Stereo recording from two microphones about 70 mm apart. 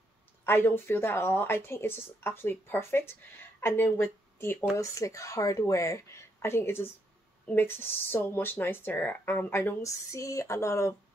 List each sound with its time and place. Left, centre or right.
0.5 s speech: left
4.7 s speech: left
9.8 s speech: left